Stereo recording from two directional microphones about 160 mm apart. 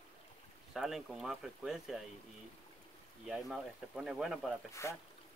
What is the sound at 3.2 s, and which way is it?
Speech, 5° right (ahead or behind).